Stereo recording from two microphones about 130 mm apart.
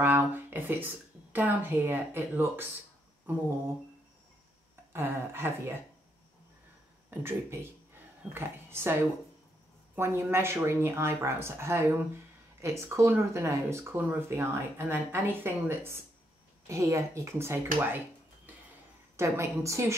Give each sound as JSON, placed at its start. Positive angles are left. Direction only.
{"t": 0.0, "sound": "a woman's voice", "side_deg": -15}
{"t": 4.9, "sound": "speech", "side_deg": -15}
{"t": 7.1, "sound": "speech", "side_deg": -20}
{"t": 9.9, "sound": "speech", "side_deg": -20}
{"t": 17.7, "sound": "a sound", "side_deg": -15}
{"t": 19.1, "sound": "speech", "side_deg": -20}